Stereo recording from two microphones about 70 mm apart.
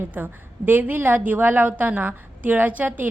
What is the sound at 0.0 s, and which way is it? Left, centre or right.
A woman's voice, right.